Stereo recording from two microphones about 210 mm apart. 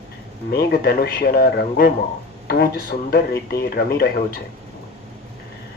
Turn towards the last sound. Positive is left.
turn(degrees=45)  # may be behind; listen again after turning